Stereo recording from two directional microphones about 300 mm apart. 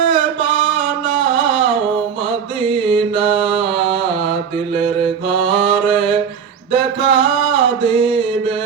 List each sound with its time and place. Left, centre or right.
0.1 s a sound: centre
1.2 s music: centre
2.6 s mantra: centre
5.4 s mantra: centre